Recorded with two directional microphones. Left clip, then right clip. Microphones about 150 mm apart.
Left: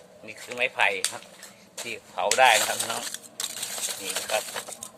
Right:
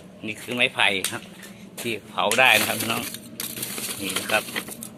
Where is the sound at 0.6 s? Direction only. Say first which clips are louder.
Right 3 dB; 5° left (ahead or behind).